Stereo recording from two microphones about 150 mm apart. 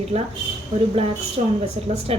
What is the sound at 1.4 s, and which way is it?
Speech, 45° right (ahead or behind).